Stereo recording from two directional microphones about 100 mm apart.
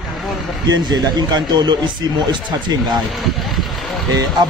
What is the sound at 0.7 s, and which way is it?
Speech, 45° right (ahead or behind).